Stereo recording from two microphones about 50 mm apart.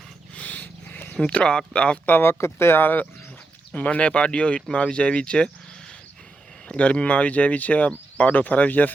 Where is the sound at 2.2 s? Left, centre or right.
Left.